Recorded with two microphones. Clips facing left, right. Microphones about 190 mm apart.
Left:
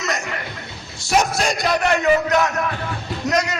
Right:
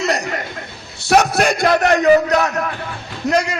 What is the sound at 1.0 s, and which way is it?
Speech, 65° right (ahead or behind).